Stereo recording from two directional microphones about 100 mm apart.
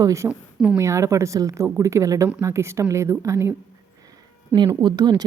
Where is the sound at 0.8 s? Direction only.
30° right (ahead or behind).